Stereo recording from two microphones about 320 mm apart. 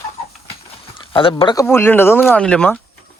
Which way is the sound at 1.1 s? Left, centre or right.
Centre.